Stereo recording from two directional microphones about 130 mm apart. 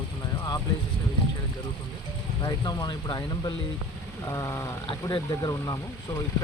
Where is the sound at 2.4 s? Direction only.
30° left (ahead or behind).